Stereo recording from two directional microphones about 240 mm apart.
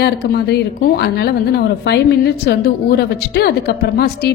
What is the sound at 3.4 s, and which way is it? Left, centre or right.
Speech, left.